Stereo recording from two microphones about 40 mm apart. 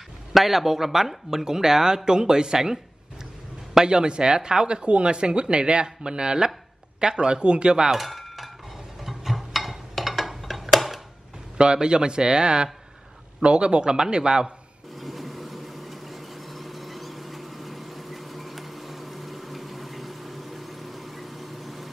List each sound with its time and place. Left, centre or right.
0.3 s speech: centre; by 7.9 s right
7.9 s cutlery: centre
9.0 s a sound: centre
11.5 s speech: right
15.0 s vehicle: centre